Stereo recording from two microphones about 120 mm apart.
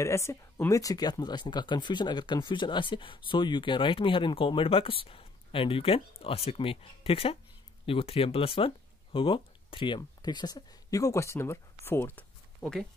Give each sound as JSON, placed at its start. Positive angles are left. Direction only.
{"t": 0.0, "sound": "speech", "side_deg": 25}